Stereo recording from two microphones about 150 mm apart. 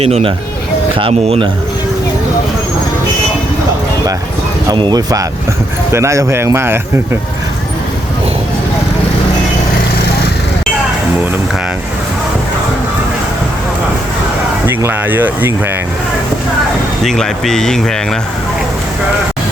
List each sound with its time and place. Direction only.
0.0 s speech: 40° right (ahead or behind)
4.7 s a man's voice: 30° right (ahead or behind)
14.8 s speech: 15° right (ahead or behind)
17.0 s speech: centre (ahead or behind)